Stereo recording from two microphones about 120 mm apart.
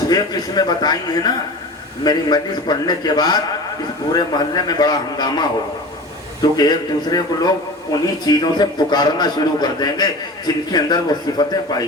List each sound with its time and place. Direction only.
0.1 s a man's voice: 35° left (ahead or behind)